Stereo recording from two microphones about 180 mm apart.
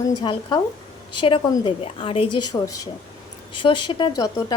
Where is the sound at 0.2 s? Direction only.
25° left (ahead or behind).